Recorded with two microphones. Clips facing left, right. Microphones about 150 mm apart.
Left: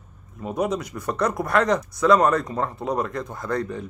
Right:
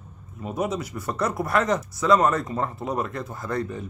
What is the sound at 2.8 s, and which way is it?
Speech, 5° right (ahead or behind).